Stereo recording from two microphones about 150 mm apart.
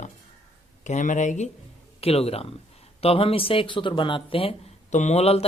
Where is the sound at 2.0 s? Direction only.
40° left (ahead or behind).